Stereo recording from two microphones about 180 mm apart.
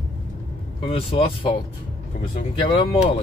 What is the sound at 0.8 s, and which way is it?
Speech, 30° left (ahead or behind).